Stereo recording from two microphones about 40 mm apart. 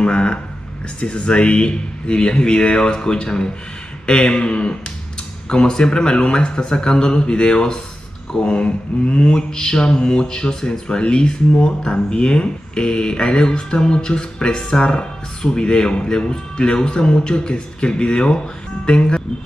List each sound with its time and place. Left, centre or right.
0.0 s speech: left